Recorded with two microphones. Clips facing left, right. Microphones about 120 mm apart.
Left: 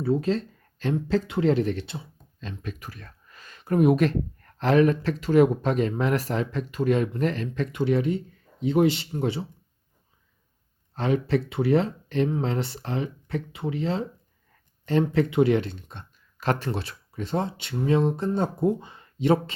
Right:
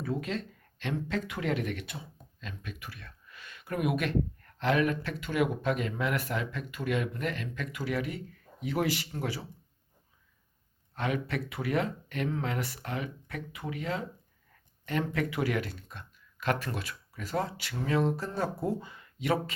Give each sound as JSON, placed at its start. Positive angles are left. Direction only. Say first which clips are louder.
{"t": 0.0, "sound": "speech", "louder": "left 9 dB", "side_deg": 30}
{"t": 10.9, "sound": "speech", "louder": "left 8 dB", "side_deg": 30}